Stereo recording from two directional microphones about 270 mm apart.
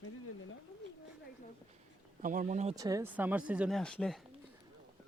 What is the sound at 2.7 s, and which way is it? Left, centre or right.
Speech, centre.